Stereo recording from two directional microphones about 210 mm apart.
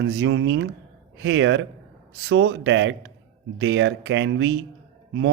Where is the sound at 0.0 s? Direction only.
55° right (ahead or behind).